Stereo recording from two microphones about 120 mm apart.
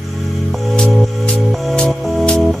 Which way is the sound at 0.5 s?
5° left (ahead or behind).